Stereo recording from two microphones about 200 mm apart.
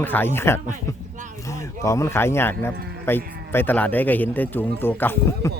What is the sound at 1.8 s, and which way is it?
Speech, 15° left (ahead or behind).